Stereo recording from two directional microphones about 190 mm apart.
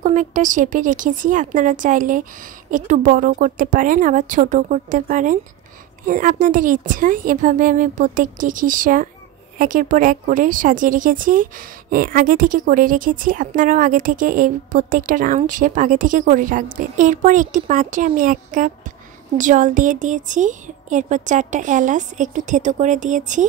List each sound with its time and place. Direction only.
0.0 s a woman's voice: 40° right (ahead or behind)